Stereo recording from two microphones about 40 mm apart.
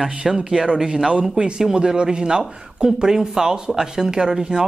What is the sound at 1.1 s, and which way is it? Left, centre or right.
A man's voice, right.